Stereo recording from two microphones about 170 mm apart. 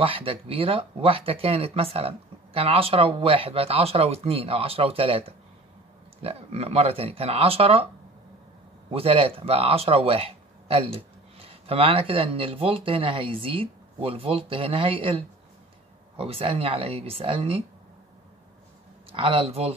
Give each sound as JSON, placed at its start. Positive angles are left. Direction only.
{"t": 0.0, "sound": "speech", "side_deg": -30}
{"t": 8.9, "sound": "speech", "side_deg": -35}
{"t": 19.1, "sound": "speech", "side_deg": -30}